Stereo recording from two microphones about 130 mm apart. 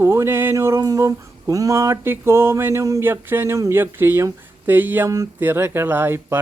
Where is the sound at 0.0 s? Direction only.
20° right (ahead or behind).